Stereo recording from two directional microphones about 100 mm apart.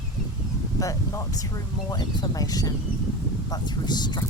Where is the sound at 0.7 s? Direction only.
35° left (ahead or behind).